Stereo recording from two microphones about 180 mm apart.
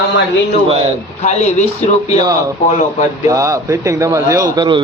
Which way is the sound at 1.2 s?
40° left (ahead or behind).